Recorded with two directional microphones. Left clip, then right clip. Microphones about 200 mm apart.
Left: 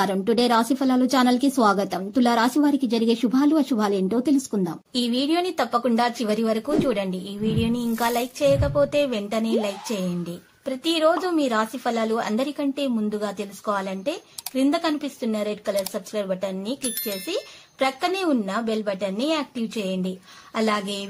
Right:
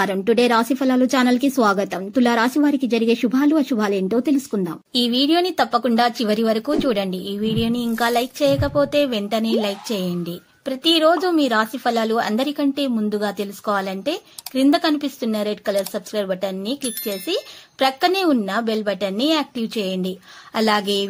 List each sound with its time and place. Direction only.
0.0 s a woman's voice: 15° right (ahead or behind)